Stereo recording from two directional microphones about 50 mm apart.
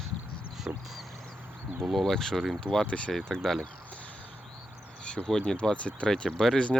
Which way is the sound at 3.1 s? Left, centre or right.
Centre.